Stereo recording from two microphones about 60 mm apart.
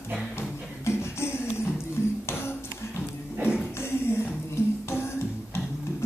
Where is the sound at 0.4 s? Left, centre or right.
Left.